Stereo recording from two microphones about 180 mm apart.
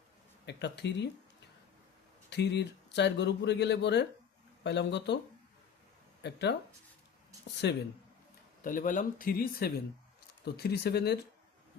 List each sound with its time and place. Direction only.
0.4 s speech: 70° left (ahead or behind)
2.3 s speech: 70° left (ahead or behind)
6.2 s speech: 70° left (ahead or behind)
7.6 s speech: 70° left (ahead or behind)
8.6 s speech: 45° left (ahead or behind); by 11.2 s 65° left (ahead or behind)